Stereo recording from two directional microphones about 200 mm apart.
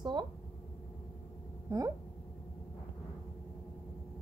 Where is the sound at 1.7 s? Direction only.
15° right (ahead or behind).